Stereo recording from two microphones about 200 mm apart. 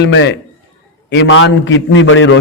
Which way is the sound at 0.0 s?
60° left (ahead or behind).